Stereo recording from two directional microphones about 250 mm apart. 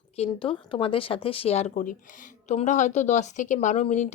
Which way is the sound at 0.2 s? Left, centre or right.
Left.